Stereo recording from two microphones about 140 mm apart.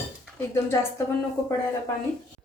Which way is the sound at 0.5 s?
20° left (ahead or behind).